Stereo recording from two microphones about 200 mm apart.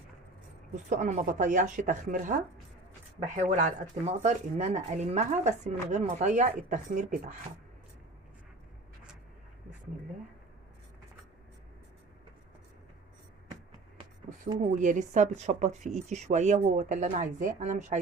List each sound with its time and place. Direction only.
0.9 s speech: 40° right (ahead or behind)
3.3 s speech: 35° right (ahead or behind)
14.7 s speech: 40° right (ahead or behind)